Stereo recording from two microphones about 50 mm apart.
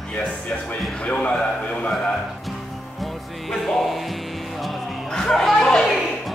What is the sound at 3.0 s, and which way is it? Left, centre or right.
Music, centre.